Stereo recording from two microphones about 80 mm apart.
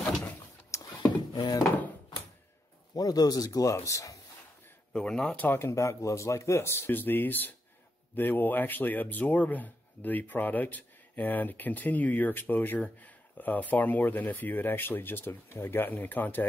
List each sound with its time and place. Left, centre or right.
0.7 s a sound: left
1.3 s speech: left
2.9 s speech: left
3.7 s speech: left
4.9 s speech: centre
5.7 s speech: left